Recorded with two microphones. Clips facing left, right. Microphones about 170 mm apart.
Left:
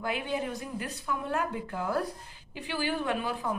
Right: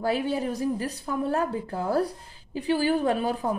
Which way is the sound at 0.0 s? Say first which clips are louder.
Right 6 dB; 35° right (ahead or behind).